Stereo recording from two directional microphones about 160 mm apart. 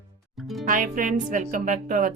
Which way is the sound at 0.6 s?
55° right (ahead or behind).